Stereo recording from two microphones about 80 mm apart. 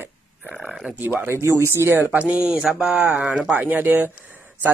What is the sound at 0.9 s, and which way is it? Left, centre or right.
Speech, right.